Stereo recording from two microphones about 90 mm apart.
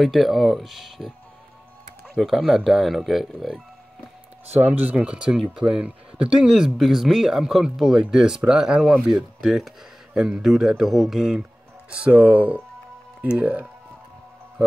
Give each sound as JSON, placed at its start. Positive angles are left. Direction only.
{"t": 0.0, "sound": "speech", "side_deg": 0}
{"t": 4.9, "sound": "speech", "side_deg": -10}